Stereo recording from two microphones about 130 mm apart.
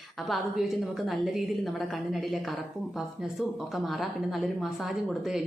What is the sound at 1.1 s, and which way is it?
Speech, centre (ahead or behind).